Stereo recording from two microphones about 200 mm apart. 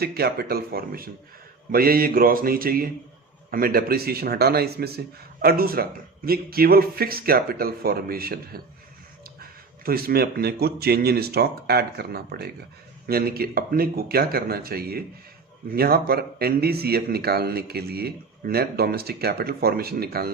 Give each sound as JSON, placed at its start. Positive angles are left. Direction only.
{"t": 0.0, "sound": "a man's voice", "side_deg": -50}